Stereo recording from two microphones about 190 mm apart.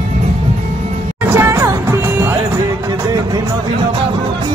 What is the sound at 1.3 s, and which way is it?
Music, 10° right (ahead or behind).